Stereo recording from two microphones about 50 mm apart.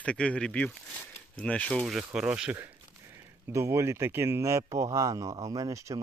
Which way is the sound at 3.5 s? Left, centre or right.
Right.